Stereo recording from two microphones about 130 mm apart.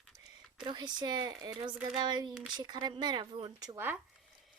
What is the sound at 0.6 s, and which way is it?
Speech, 35° right (ahead or behind).